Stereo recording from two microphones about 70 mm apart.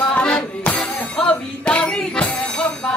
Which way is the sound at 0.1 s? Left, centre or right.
Centre.